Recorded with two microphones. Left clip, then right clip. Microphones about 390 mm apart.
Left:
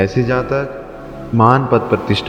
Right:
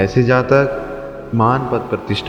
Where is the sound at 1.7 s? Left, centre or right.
Left.